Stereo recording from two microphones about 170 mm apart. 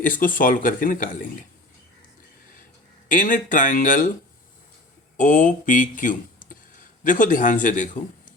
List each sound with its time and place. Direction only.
0.0 s a man's voice: 50° left (ahead or behind)
3.1 s a man's voice: 50° left (ahead or behind)
5.1 s a man's voice: 50° left (ahead or behind)